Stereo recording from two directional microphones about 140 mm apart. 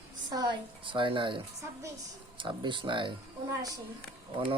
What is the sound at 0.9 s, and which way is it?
Speech, 35° right (ahead or behind).